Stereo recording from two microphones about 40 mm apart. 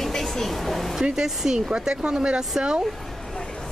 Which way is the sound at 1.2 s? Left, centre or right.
Centre.